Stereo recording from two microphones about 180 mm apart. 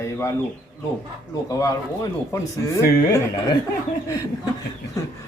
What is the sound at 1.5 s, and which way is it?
A man's voice, 15° left (ahead or behind).